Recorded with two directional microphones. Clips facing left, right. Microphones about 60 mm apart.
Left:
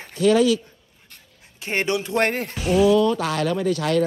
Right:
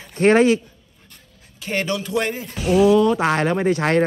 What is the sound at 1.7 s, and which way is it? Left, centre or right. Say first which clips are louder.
Speech: even; left.